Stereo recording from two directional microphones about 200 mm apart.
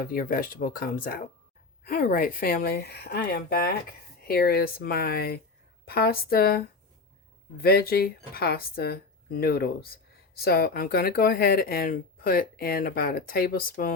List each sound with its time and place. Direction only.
0.0 s speech: 45° left (ahead or behind)
7.6 s speech: 50° left (ahead or behind)